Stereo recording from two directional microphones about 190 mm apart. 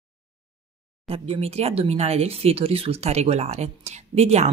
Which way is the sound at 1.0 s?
30° right (ahead or behind).